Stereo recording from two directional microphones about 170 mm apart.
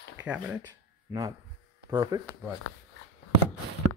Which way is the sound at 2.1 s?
20° right (ahead or behind).